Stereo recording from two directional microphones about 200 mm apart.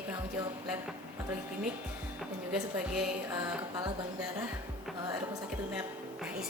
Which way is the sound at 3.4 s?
20° right (ahead or behind).